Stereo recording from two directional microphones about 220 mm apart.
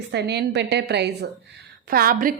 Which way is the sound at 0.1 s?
50° right (ahead or behind).